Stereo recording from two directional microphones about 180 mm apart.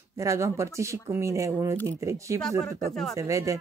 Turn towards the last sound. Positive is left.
turn(degrees=-15)  # may be behind; listen again after turning